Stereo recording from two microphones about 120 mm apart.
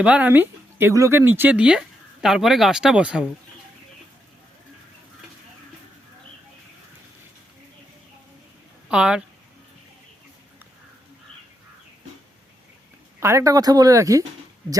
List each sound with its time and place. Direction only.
0.0 s speech: 10° right (ahead or behind)
8.9 s speech: 5° right (ahead or behind)
13.1 s speech: 25° right (ahead or behind)